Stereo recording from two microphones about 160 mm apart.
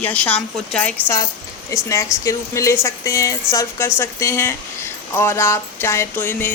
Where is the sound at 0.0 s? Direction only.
10° left (ahead or behind).